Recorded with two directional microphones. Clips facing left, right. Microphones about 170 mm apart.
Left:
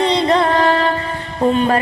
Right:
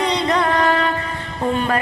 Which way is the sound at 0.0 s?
30° left (ahead or behind).